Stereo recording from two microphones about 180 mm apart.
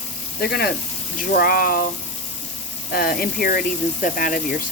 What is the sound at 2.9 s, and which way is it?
Speech, 55° left (ahead or behind).